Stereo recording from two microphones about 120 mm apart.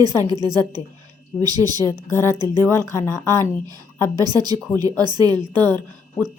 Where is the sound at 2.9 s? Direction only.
25° left (ahead or behind).